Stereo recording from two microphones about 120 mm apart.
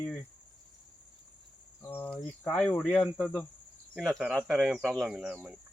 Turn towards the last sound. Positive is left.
turn(degrees=-10)  # may be behind; listen again after turning